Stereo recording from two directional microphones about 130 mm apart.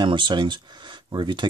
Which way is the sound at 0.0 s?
35° right (ahead or behind).